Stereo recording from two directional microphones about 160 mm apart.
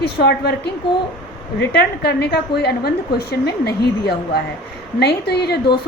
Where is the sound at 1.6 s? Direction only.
90° left.